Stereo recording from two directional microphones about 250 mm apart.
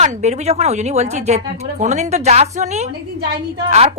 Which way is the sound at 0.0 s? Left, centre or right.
Right.